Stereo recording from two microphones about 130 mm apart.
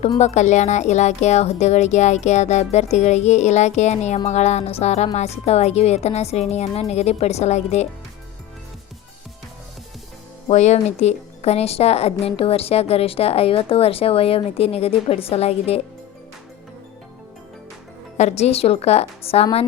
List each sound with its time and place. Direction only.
0.2 s a woman's voice: 65° left (ahead or behind)
10.5 s speech: 60° left (ahead or behind)
18.2 s speech: 60° left (ahead or behind)